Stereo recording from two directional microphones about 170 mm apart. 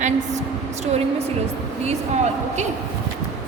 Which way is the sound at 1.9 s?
40° right (ahead or behind).